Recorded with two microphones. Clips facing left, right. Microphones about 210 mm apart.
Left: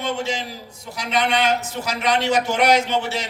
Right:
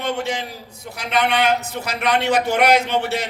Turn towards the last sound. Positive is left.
turn(degrees=-60)  # may be behind; listen again after turning